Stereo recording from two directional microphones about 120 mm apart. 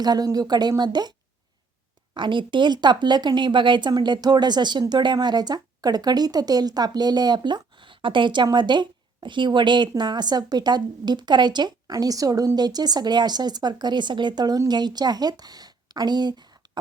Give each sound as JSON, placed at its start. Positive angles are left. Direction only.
{"t": 0.0, "sound": "speech", "side_deg": -35}
{"t": 2.1, "sound": "speech", "side_deg": -40}